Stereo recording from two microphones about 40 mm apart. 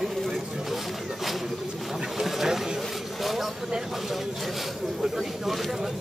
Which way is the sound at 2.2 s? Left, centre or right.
Centre.